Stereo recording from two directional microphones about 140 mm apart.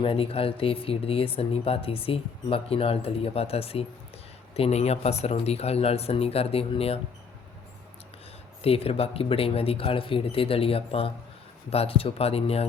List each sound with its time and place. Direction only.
0.0 s speech: 45° left (ahead or behind)
8.6 s speech: 45° left (ahead or behind)